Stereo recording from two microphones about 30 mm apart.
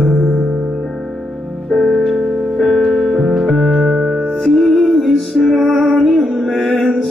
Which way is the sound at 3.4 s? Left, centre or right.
Centre.